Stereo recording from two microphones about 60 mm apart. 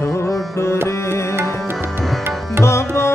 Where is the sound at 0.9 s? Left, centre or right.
Left.